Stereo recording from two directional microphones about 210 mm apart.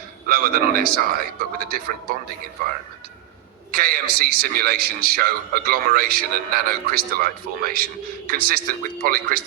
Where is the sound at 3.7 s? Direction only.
45° right (ahead or behind).